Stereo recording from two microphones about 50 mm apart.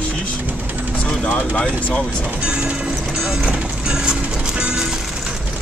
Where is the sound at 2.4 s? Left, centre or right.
Centre.